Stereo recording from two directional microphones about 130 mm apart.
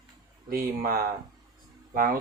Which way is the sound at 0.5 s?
90° right.